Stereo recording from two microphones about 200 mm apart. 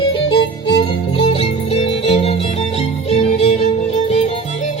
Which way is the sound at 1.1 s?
25° left (ahead or behind).